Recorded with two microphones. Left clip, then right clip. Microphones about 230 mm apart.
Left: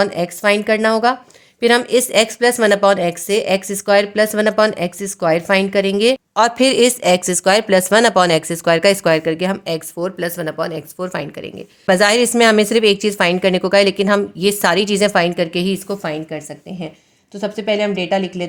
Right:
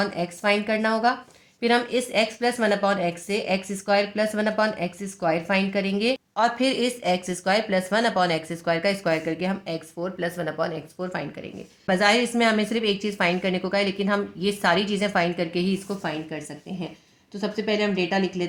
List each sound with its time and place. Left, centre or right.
0.0 s speech: left